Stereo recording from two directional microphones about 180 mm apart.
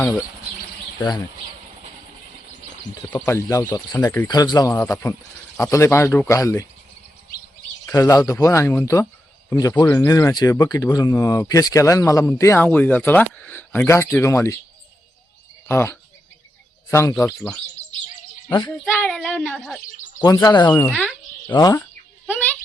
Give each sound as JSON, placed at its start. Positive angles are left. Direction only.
{"t": 0.9, "sound": "speech", "side_deg": 25}
{"t": 3.1, "sound": "speech", "side_deg": 10}
{"t": 7.9, "sound": "speech", "side_deg": 20}
{"t": 15.6, "sound": "speech", "side_deg": 15}
{"t": 18.4, "sound": "speech", "side_deg": 25}
{"t": 18.7, "sound": "speech", "side_deg": 5}
{"t": 20.2, "sound": "speech", "side_deg": 20}
{"t": 20.7, "sound": "speech", "side_deg": 10}
{"t": 21.4, "sound": "speech", "side_deg": 20}
{"t": 22.3, "sound": "a sound", "side_deg": 10}